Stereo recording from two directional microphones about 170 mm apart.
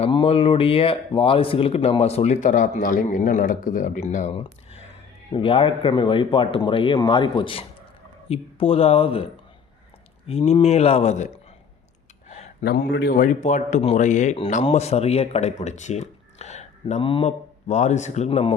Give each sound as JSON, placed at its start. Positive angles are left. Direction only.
{"t": 0.0, "sound": "speech", "side_deg": 30}
{"t": 5.3, "sound": "speech", "side_deg": 30}
{"t": 10.2, "sound": "speech", "side_deg": 35}
{"t": 12.6, "sound": "speech", "side_deg": 70}